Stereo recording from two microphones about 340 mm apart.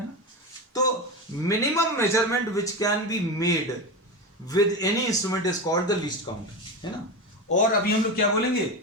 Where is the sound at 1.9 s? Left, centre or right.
Centre.